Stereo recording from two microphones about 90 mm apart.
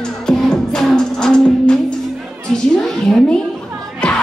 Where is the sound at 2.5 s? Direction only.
5° left (ahead or behind).